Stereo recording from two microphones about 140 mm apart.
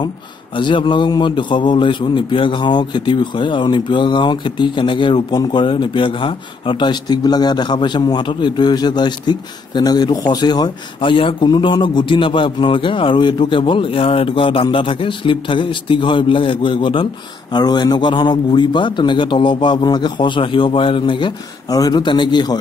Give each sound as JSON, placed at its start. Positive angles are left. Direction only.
{"t": 0.6, "sound": "a man's voice", "side_deg": 35}